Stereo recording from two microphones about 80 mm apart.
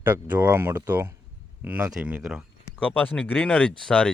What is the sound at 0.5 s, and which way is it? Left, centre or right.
Speech, right.